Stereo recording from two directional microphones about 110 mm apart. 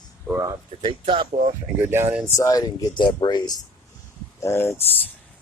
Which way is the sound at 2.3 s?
35° left (ahead or behind).